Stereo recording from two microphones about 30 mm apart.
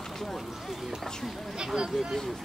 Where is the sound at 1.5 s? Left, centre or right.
Right.